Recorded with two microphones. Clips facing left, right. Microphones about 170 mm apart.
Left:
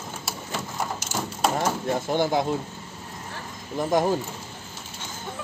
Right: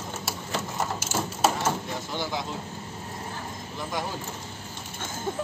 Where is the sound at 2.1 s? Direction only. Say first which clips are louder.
Left 9 dB; 50° left (ahead or behind).